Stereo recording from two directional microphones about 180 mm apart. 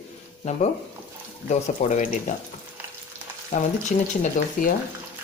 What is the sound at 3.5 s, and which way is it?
Speech, 40° left (ahead or behind).